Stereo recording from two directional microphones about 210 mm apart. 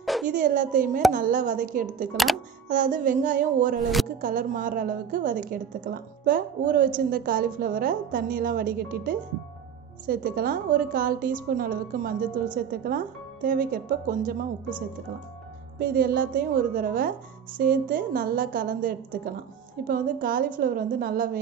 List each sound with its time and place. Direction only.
0.0 s a sound: centre (ahead or behind)
0.3 s a woman's voice: 40° right (ahead or behind)
2.1 s speech: centre (ahead or behind)
2.7 s a woman's voice: 40° right (ahead or behind)
15.8 s a woman's voice: 45° right (ahead or behind)